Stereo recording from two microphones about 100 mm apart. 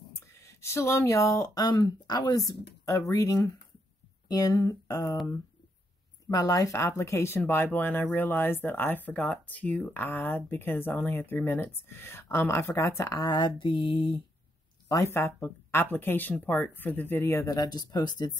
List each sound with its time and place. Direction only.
0.1 s speech: 30° left (ahead or behind)
6.2 s speech: 35° left (ahead or behind)
13.6 s mantra: 55° left (ahead or behind)
14.9 s speech: 30° left (ahead or behind); by 18.4 s 45° left (ahead or behind)